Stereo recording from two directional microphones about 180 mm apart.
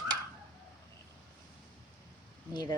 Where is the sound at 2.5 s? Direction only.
20° left (ahead or behind).